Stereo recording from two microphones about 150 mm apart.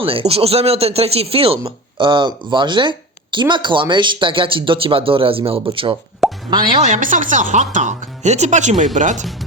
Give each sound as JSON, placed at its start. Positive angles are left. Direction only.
{"t": 0.0, "sound": "a man's voice", "side_deg": -40}
{"t": 6.2, "sound": "plop", "side_deg": -5}
{"t": 6.8, "sound": "speech", "side_deg": -60}